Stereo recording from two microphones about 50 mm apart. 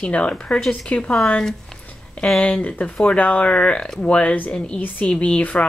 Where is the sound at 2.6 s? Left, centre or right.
Left.